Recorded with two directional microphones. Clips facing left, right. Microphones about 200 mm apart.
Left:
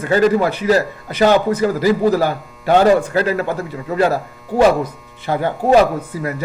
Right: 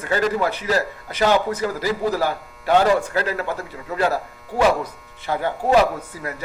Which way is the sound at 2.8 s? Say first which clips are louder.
Left 6 dB; 35° left (ahead or behind).